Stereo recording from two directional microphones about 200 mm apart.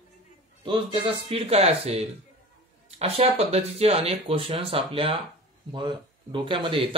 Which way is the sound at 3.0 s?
30° right (ahead or behind).